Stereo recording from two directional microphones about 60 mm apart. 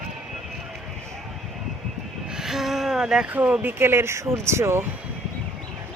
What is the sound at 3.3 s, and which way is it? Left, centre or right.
Speech, right.